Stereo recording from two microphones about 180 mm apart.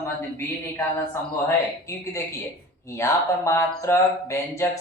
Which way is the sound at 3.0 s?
15° left (ahead or behind).